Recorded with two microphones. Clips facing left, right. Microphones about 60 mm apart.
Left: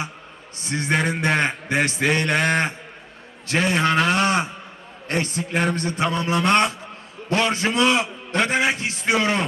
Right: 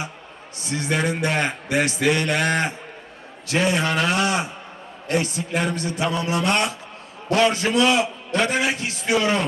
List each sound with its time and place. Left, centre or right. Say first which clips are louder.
0.6 s a man's voice: left 1 dB; left